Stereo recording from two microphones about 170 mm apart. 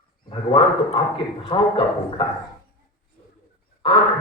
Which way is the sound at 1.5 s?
30° left (ahead or behind).